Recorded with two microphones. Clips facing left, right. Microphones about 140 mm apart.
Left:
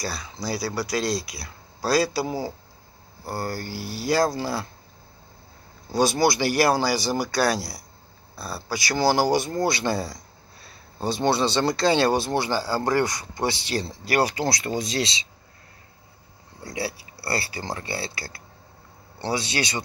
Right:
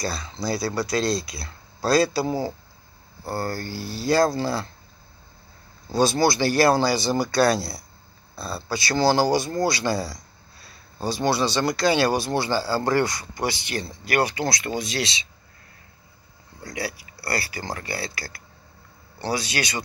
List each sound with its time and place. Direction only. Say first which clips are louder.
0.0 s speech: right 3 dB; 10° left (ahead or behind)
5.9 s speech: right 1 dB; 15° left (ahead or behind)
16.6 s speech: left 1 dB; 30° left (ahead or behind)